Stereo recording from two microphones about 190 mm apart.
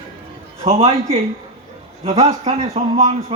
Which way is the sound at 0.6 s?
30° right (ahead or behind).